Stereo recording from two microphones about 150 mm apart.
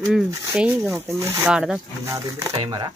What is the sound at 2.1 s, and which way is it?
Speech, 20° right (ahead or behind).